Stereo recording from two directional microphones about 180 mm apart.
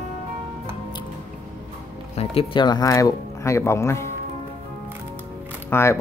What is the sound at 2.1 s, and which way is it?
Speech, 30° left (ahead or behind).